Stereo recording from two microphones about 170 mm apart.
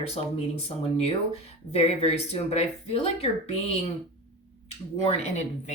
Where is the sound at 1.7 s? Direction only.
35° left (ahead or behind).